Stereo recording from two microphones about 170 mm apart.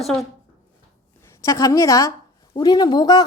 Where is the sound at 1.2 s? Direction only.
15° left (ahead or behind).